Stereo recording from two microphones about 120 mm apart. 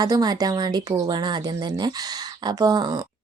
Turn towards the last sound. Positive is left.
turn(degrees=-35)  # may be behind; listen again after turning